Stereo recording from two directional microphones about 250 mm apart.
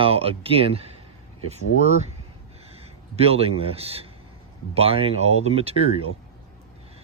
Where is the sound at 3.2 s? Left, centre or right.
Right.